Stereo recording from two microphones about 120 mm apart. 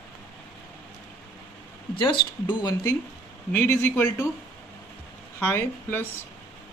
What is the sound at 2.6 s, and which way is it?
Speech, 30° left (ahead or behind).